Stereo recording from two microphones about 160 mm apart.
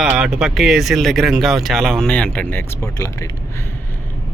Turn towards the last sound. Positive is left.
turn(degrees=20)  # may be behind; listen again after turning